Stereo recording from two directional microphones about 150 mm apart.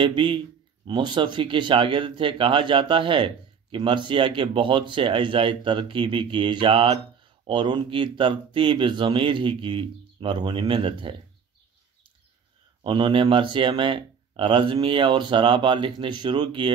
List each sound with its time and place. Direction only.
0.0 s speech: 35° right (ahead or behind)
12.8 s speech: 35° right (ahead or behind)